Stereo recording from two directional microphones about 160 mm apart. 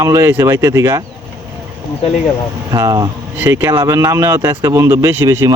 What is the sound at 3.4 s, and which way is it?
Speech, 15° right (ahead or behind).